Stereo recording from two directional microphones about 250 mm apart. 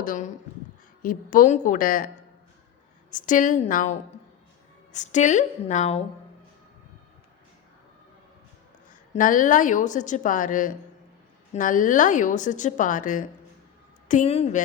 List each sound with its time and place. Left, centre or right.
0.0 s a woman's voice: left
3.1 s a woman's voice: left
8.9 s a woman's voice: left